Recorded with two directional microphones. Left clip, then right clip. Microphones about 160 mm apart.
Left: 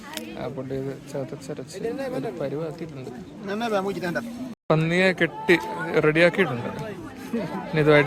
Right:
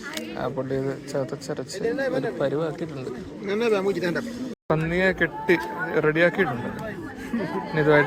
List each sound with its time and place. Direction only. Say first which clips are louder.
0.3 s speech: right 4 dB; 15° left (ahead or behind)
3.4 s speech: right 3 dB; 55° left (ahead or behind)
7.8 s speech: left 1 dB; 45° left (ahead or behind)